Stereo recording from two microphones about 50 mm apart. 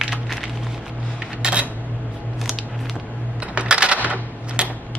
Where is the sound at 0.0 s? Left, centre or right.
Centre.